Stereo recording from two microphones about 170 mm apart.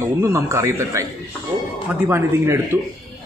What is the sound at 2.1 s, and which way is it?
Speech, 15° right (ahead or behind).